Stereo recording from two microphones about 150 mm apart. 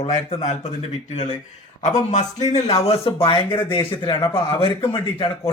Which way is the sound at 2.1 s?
50° left (ahead or behind).